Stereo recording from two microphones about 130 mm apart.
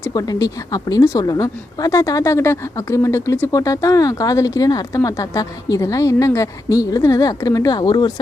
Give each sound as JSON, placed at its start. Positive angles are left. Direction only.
{"t": 0.1, "sound": "a woman's voice", "side_deg": 30}